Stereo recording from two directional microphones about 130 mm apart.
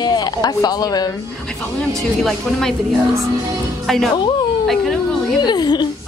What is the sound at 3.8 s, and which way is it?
Speech, centre (ahead or behind).